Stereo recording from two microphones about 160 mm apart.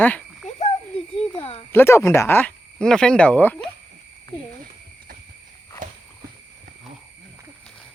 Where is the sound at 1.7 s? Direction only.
15° left (ahead or behind).